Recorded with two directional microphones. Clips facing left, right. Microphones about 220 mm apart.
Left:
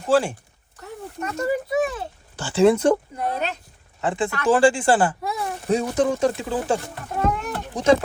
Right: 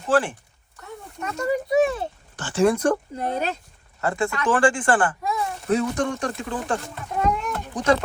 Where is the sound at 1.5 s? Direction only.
25° right (ahead or behind).